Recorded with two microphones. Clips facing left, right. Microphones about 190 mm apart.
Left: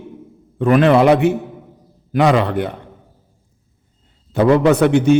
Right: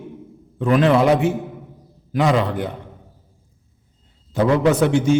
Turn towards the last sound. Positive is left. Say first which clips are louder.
# left 4 dB
turn(degrees=60)  # may be behind; listen again after turning